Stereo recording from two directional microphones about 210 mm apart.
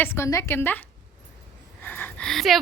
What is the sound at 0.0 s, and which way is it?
Speech, 15° left (ahead or behind).